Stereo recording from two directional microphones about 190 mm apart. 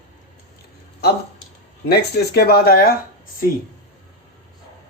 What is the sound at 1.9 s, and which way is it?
Speech, 55° left (ahead or behind).